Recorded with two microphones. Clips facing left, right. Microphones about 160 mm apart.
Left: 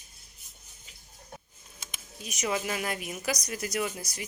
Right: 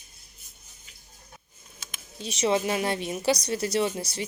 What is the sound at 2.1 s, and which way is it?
A woman's voice, 30° right (ahead or behind).